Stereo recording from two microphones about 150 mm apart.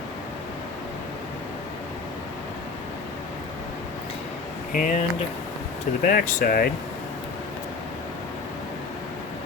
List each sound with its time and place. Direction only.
4.7 s speech: 60° left (ahead or behind)